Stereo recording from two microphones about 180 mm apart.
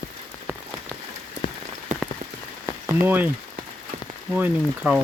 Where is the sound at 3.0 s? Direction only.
10° right (ahead or behind).